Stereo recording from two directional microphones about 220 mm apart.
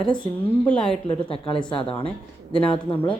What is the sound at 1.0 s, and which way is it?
A woman's voice, 25° left (ahead or behind).